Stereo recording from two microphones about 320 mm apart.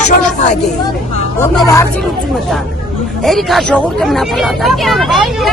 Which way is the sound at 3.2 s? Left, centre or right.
Centre.